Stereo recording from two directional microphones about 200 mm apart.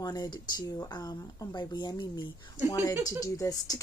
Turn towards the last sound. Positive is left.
turn(degrees=15)  # may be behind; listen again after turning